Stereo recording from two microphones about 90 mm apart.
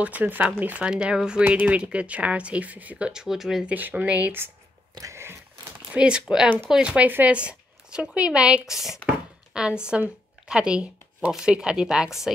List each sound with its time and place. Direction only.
0.0 s speech: 20° right (ahead or behind)
3.6 s speech: 15° right (ahead or behind)
5.9 s speech: 10° right (ahead or behind)